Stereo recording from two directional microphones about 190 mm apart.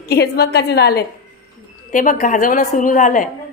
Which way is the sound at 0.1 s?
60° left (ahead or behind).